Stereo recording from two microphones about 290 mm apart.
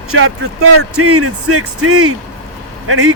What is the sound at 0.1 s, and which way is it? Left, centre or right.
Speech, right.